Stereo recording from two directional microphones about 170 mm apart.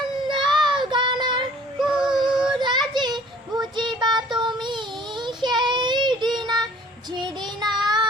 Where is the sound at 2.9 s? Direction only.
25° right (ahead or behind).